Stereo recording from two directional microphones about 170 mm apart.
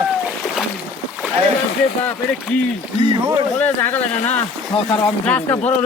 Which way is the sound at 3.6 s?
10° left (ahead or behind).